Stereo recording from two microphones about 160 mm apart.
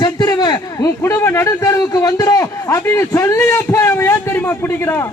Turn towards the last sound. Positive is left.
turn(degrees=15)  # may be behind; listen again after turning